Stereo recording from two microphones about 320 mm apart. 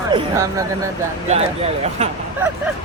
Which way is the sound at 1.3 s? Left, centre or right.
Centre.